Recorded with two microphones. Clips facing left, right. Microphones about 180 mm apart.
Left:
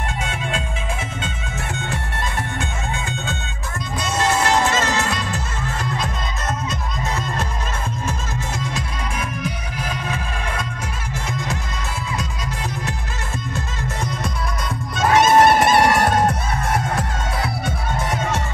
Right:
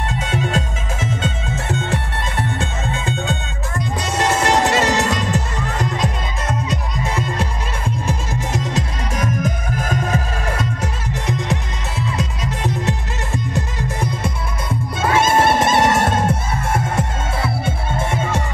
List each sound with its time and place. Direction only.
0.3 s music: 40° right (ahead or behind)
1.5 s music: 20° right (ahead or behind)
2.6 s music: 35° right (ahead or behind)
4.0 s music: 20° right (ahead or behind)
8.1 s music: 15° right (ahead or behind)
9.1 s music: 40° right (ahead or behind)
10.8 s music: 25° right (ahead or behind)
15.0 s music: 25° right (ahead or behind)